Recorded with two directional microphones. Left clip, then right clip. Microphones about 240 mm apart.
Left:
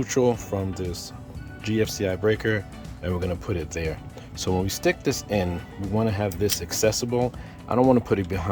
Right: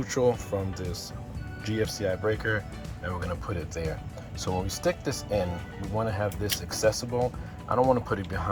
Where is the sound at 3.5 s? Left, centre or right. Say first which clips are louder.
Left 4 dB; left.